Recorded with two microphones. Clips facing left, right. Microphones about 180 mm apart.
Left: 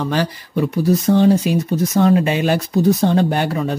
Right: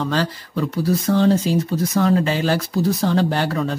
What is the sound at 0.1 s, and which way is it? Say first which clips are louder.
Speech: left 2 dB; 15° left (ahead or behind).